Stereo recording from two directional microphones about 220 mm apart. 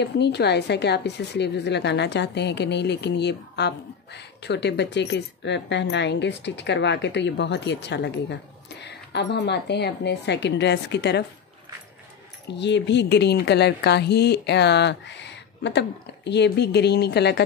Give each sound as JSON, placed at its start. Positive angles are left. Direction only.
{"t": 0.0, "sound": "a woman's voice", "side_deg": 50}
{"t": 12.4, "sound": "a woman's voice", "side_deg": 50}